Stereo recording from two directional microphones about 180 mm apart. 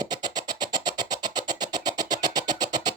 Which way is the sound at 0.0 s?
20° right (ahead or behind).